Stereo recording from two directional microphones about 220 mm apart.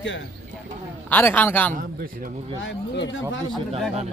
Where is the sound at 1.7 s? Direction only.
40° right (ahead or behind).